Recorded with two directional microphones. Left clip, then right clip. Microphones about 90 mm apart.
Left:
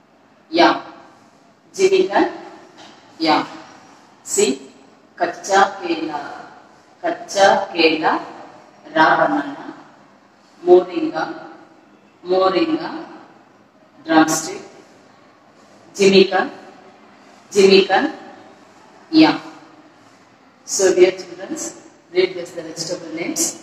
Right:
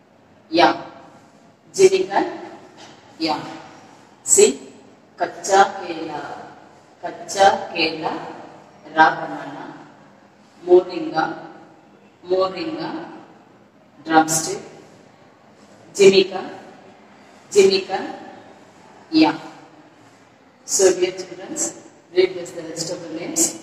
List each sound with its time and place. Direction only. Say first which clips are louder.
0.5 s a sound: left 1 dB; 35° left (ahead or behind)
4.3 s a woman's voice: right 4 dB; 35° left (ahead or behind)
16.0 s a woman's voice: left 1 dB; 35° left (ahead or behind)
20.7 s a woman's voice: left 3 dB; 35° left (ahead or behind)